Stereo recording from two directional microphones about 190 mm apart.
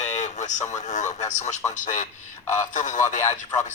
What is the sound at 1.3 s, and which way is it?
Speech, 40° left (ahead or behind).